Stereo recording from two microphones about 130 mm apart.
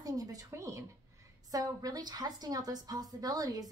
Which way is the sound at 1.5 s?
30° right (ahead or behind).